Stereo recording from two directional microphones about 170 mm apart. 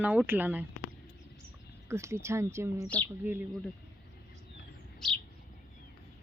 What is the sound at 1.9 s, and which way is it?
A woman's voice, 15° right (ahead or behind).